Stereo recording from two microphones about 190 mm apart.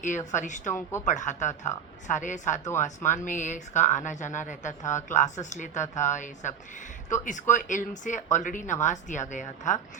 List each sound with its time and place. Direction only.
0.3 s speech: 40° left (ahead or behind)
0.7 s a woman's voice: 15° left (ahead or behind)
1.0 s speech: 40° left (ahead or behind)